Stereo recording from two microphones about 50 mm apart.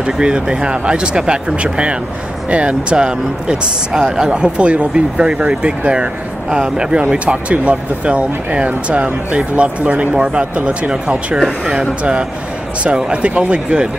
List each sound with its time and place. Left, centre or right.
0.0 s speech: centre